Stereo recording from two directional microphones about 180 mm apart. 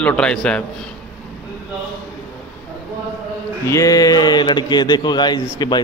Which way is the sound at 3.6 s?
20° left (ahead or behind).